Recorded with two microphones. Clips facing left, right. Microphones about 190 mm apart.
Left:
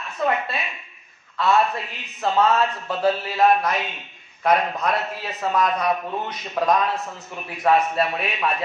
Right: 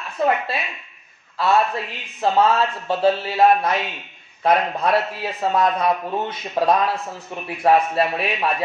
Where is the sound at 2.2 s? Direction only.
30° right (ahead or behind).